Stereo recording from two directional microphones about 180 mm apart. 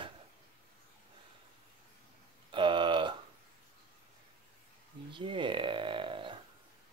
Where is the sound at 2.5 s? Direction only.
30° right (ahead or behind).